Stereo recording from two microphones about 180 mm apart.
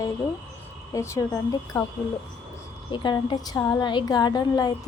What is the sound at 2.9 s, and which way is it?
A woman's voice, 25° left (ahead or behind).